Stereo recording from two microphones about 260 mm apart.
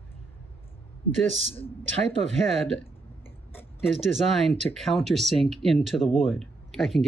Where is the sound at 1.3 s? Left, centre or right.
Left.